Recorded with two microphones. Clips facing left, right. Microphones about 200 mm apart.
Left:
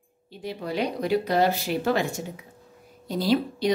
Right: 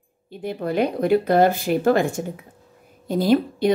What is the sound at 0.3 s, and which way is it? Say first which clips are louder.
A woman's voice: right 6 dB; 55° right (ahead or behind).